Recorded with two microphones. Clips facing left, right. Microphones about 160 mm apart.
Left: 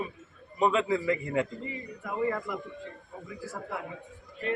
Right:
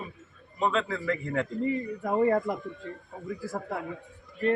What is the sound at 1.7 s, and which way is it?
Speech, 45° right (ahead or behind).